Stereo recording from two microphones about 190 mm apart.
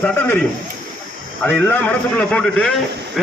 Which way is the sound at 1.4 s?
10° left (ahead or behind).